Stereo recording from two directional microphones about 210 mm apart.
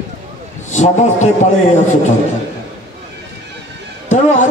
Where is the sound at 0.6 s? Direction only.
35° left (ahead or behind).